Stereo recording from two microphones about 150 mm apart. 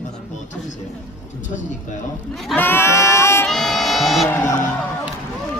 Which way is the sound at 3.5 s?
Centre (ahead or behind).